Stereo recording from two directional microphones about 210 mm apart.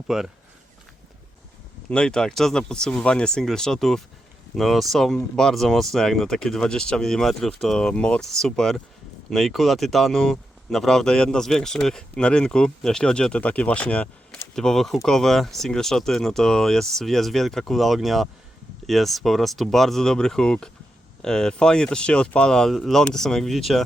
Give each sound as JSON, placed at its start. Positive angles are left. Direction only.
{"t": 0.1, "sound": "speech", "side_deg": -5}
{"t": 1.9, "sound": "speech", "side_deg": 5}